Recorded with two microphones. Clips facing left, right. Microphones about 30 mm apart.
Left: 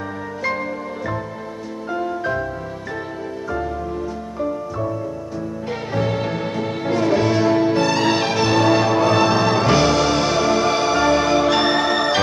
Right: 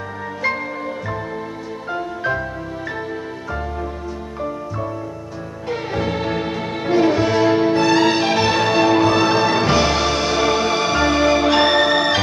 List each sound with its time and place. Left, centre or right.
4.4 s music: centre
5.9 s music: centre
7.1 s music: centre
7.5 s music: centre
10.0 s music: centre